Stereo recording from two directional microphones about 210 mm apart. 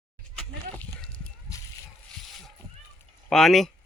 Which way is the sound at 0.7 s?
10° left (ahead or behind).